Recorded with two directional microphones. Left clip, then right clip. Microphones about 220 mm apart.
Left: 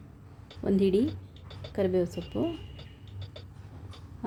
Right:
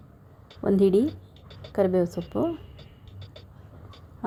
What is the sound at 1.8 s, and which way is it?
Speech, 15° right (ahead or behind).